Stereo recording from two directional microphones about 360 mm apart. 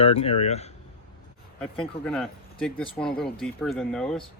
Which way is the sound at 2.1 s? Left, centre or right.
Centre.